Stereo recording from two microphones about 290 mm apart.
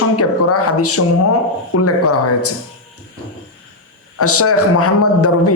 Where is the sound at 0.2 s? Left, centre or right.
Left.